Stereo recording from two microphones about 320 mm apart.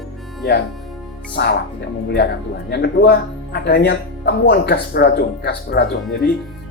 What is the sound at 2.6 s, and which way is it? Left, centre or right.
Speech, left.